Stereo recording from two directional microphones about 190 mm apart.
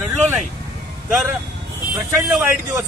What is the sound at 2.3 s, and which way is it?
Speech, 10° right (ahead or behind).